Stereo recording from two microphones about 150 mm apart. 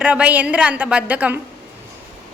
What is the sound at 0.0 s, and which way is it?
A woman's voice, 10° right (ahead or behind).